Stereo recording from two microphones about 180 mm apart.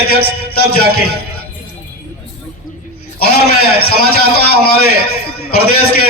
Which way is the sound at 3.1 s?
60° left (ahead or behind).